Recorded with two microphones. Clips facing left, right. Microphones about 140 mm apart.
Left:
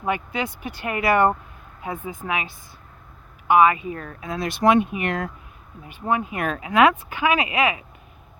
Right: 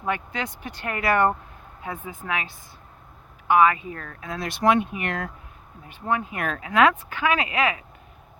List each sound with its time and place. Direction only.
0.0 s speech: 10° left (ahead or behind)